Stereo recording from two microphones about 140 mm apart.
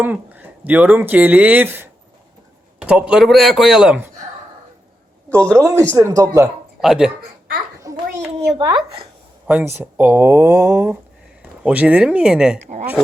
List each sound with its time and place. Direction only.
0.0 s a man's voice: 10° right (ahead or behind)
5.5 s speech: 20° right (ahead or behind)
6.8 s a man's voice: 5° right (ahead or behind)
7.9 s a sound: 25° right (ahead or behind)
8.4 s a child's voice: 40° right (ahead or behind)
9.5 s speech: 15° right (ahead or behind)
12.5 s a woman's voice: 55° right (ahead or behind)